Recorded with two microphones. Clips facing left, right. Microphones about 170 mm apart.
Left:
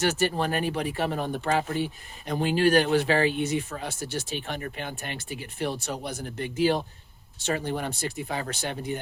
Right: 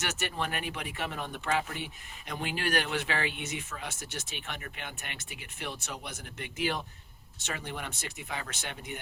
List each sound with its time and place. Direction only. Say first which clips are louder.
0.0 s speech: left 9 dB; 35° left (ahead or behind)